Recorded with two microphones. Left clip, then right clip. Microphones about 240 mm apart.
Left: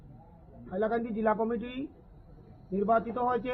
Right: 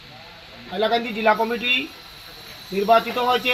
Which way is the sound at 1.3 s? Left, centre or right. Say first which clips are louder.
Right 11 dB; right.